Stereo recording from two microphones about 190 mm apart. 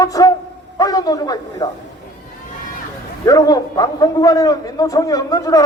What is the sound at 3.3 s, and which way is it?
A man's voice, 20° left (ahead or behind).